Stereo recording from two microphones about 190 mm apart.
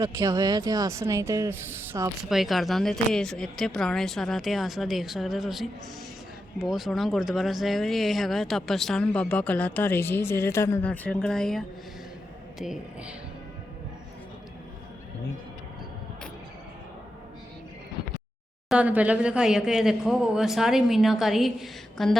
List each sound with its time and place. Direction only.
0.0 s speech: 20° right (ahead or behind)
2.3 s speech: centre (ahead or behind)
18.7 s speech: 10° right (ahead or behind)